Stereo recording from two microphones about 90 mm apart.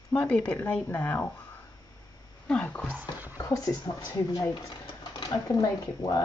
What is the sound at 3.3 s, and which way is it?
Speech, 40° left (ahead or behind).